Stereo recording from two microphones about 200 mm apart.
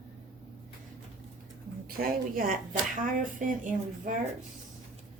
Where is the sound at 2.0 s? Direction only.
45° right (ahead or behind).